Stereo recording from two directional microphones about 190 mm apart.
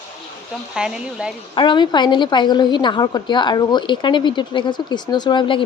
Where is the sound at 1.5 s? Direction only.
25° left (ahead or behind).